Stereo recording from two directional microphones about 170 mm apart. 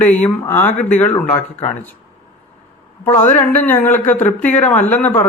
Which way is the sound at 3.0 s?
10° left (ahead or behind).